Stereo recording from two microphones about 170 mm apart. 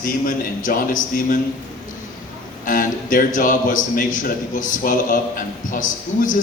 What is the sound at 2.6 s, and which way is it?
A man's voice, 55° left (ahead or behind).